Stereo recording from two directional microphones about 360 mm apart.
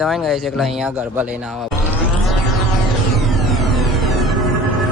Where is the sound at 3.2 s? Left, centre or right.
Centre.